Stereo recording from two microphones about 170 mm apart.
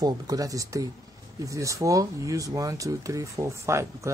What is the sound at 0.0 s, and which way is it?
Speech, 20° right (ahead or behind).